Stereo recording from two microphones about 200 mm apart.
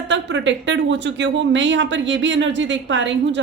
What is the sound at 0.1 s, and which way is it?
Speech, 65° right (ahead or behind).